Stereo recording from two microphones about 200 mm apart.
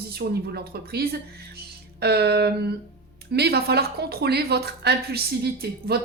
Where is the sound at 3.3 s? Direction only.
55° right (ahead or behind).